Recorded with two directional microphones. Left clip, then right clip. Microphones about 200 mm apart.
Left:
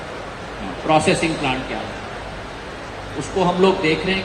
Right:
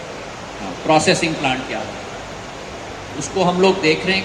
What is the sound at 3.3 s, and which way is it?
Speech, 55° right (ahead or behind).